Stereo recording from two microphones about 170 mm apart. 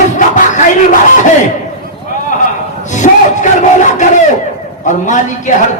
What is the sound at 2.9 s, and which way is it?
A man's voice, 45° left (ahead or behind).